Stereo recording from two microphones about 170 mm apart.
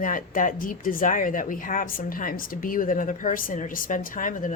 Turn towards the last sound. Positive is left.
turn(degrees=50)  # may be behind; listen again after turning